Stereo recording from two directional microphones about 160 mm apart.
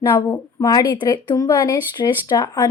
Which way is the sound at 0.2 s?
20° left (ahead or behind).